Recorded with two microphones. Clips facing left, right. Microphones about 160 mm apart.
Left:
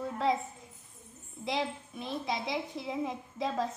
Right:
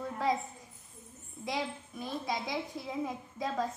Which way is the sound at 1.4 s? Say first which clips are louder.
Left 2 dB; 25° left (ahead or behind).